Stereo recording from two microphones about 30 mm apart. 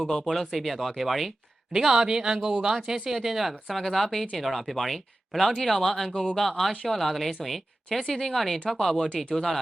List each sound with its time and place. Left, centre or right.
0.3 s speech: centre
1.7 s speech: centre
3.1 s speech: centre
3.7 s speech: centre